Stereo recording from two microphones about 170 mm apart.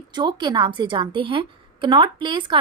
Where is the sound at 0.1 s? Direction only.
25° right (ahead or behind).